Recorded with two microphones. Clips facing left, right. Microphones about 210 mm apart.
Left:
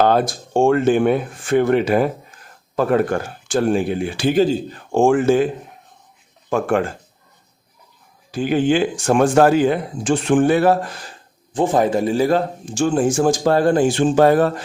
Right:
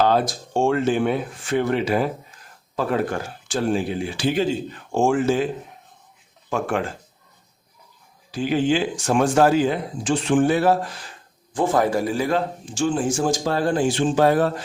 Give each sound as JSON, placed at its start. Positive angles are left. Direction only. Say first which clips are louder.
{"t": 0.0, "sound": "a man's voice", "louder": "left 3 dB", "side_deg": 55}
{"t": 4.4, "sound": "speech", "louder": "left 6 dB", "side_deg": 35}
{"t": 4.9, "sound": "a man's voice", "louder": "left 5 dB", "side_deg": 55}
{"t": 6.5, "sound": "a man's voice", "louder": "left 5 dB", "side_deg": 50}
{"t": 8.3, "sound": "a man's voice", "louder": "left 3 dB", "side_deg": 50}
{"t": 11.5, "sound": "a man's voice", "louder": "left 3 dB", "side_deg": 20}